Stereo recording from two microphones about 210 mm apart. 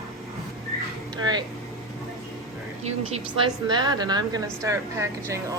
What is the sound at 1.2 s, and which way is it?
Speech, 20° right (ahead or behind).